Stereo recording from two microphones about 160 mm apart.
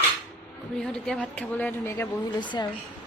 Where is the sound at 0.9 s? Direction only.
5° left (ahead or behind).